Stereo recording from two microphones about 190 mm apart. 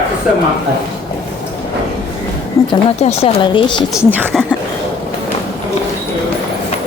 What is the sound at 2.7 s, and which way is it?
Speech, 35° left (ahead or behind).